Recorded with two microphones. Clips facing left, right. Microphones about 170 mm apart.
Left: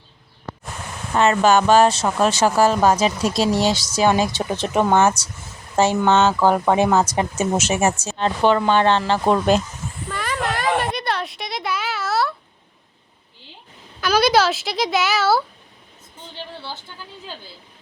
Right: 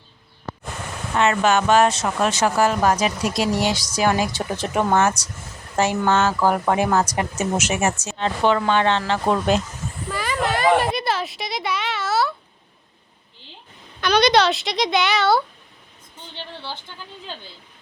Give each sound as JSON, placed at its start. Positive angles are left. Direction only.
{"t": 1.1, "sound": "speech", "side_deg": 35}
{"t": 10.1, "sound": "a sound", "side_deg": 0}
{"t": 14.0, "sound": "speech", "side_deg": 5}